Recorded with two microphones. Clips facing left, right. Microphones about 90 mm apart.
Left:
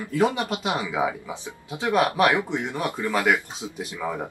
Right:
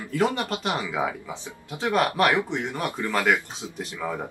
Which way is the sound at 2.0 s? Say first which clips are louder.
Left 1 dB; 15° left (ahead or behind).